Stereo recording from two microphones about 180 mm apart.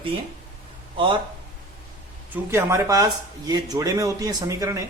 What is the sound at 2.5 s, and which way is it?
A man's voice, 15° right (ahead or behind).